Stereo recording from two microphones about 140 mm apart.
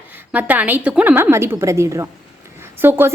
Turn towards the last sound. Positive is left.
turn(degrees=-15)  # may be behind; listen again after turning